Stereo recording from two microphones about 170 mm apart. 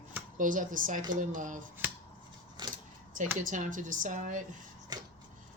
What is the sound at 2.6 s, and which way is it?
Keys jangling, 25° right (ahead or behind).